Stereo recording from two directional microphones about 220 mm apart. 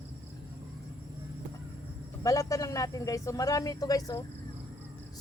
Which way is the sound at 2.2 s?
15° left (ahead or behind).